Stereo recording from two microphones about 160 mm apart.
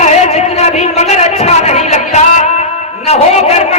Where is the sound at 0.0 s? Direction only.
45° left (ahead or behind).